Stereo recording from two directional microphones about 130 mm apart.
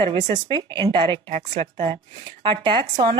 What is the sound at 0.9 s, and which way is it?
Speech, 40° right (ahead or behind).